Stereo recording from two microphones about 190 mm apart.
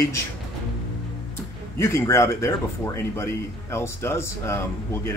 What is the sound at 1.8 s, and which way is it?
Speech, 15° left (ahead or behind).